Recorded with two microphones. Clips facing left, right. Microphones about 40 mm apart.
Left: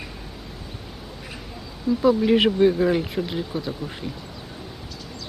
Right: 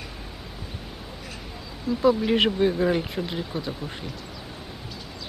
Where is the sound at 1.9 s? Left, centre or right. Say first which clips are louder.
Left 3 dB; centre.